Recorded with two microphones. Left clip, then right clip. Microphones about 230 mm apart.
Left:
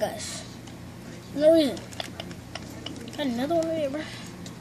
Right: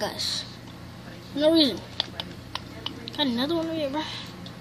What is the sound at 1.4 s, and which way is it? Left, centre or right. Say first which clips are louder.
Speech: left 1 dB; centre.